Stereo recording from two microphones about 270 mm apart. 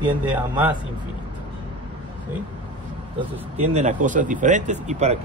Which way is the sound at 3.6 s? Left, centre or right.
Right.